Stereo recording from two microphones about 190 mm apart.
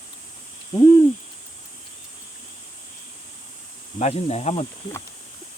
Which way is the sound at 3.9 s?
35° left (ahead or behind).